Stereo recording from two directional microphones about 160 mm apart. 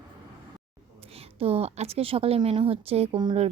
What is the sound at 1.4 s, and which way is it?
A woman's voice, 40° right (ahead or behind).